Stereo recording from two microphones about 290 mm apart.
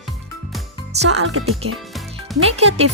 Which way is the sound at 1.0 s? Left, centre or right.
Right.